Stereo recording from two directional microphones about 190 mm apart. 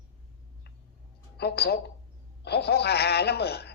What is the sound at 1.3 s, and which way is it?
Speech, 60° left (ahead or behind).